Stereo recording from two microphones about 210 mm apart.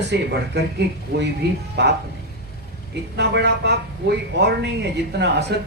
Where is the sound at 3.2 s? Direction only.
55° right (ahead or behind).